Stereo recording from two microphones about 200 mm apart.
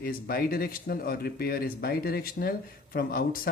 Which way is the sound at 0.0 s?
50° left (ahead or behind).